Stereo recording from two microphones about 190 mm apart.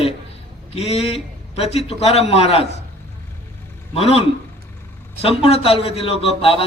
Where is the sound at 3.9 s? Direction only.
30° left (ahead or behind).